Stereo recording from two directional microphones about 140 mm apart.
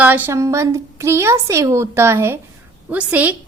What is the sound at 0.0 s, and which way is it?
A woman's voice, 15° right (ahead or behind).